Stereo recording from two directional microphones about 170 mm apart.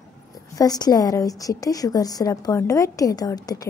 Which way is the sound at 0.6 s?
20° left (ahead or behind).